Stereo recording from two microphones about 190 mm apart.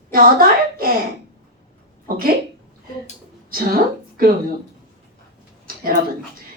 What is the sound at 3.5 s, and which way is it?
Speech, 50° right (ahead or behind).